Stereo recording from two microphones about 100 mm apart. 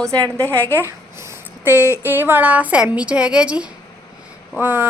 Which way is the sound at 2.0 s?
20° right (ahead or behind).